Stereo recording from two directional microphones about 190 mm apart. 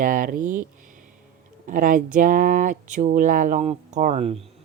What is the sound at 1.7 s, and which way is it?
Speech, 45° right (ahead or behind).